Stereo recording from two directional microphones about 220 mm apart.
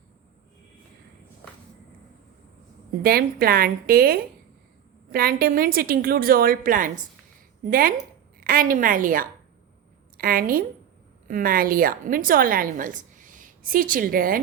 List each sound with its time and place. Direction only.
3.0 s a woman's voice: 45° right (ahead or behind)